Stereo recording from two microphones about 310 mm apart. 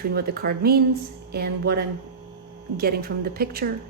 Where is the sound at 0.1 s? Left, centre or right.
Right.